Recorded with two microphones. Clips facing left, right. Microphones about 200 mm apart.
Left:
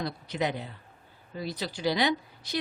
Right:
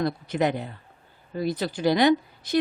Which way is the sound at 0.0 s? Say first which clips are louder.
Right 6 dB; 50° right (ahead or behind).